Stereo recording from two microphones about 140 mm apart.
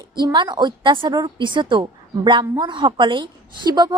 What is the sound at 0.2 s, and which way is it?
A woman's voice, 30° right (ahead or behind).